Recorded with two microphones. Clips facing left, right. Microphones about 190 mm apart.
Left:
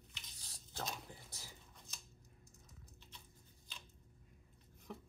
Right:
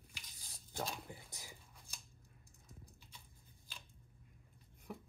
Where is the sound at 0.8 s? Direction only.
15° right (ahead or behind).